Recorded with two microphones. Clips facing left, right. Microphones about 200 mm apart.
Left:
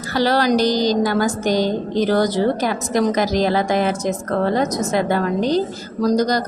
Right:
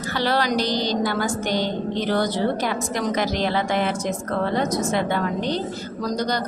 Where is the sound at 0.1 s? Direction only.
40° left (ahead or behind).